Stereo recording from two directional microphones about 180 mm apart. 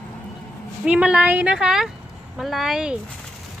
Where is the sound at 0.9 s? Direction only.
5° right (ahead or behind).